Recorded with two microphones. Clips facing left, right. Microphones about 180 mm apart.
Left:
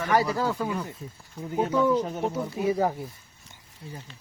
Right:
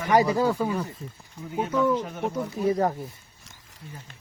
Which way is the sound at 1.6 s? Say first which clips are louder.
Even; 10° left (ahead or behind).